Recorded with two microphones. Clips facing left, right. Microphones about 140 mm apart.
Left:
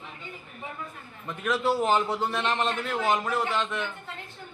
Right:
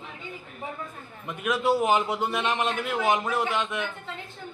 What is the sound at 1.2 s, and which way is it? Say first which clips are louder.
A man's voice: right 1 dB; 15° right (ahead or behind).